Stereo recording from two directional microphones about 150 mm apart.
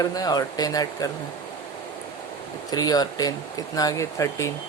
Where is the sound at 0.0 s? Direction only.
25° left (ahead or behind).